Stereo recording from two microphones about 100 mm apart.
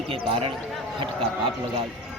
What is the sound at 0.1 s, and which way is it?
Speech, 65° right (ahead or behind).